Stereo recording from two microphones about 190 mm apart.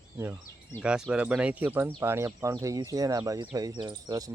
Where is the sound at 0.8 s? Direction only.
5° right (ahead or behind).